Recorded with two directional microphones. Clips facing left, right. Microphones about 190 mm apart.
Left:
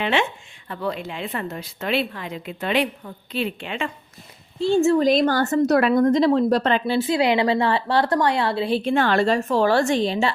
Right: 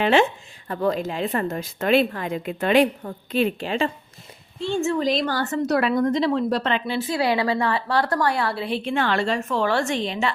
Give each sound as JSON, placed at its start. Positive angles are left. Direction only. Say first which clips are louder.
{"t": 0.0, "sound": "a woman's voice", "louder": "right 4 dB", "side_deg": -40}
{"t": 4.6, "sound": "a woman's voice", "louder": "left 6 dB", "side_deg": 35}
{"t": 5.0, "sound": "a woman's voice", "louder": "left 5 dB", "side_deg": 50}
{"t": 7.2, "sound": "a woman's voice", "louder": "even", "side_deg": 20}